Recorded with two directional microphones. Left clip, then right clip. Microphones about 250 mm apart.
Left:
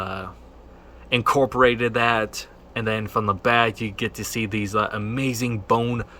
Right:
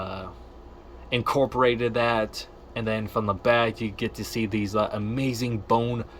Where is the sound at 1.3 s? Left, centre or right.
Centre.